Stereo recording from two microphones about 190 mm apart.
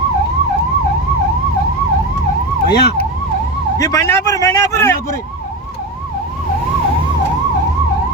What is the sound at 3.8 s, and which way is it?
Speech, 15° left (ahead or behind).